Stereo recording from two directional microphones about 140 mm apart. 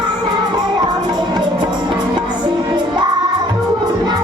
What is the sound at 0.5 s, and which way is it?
Music, 30° right (ahead or behind).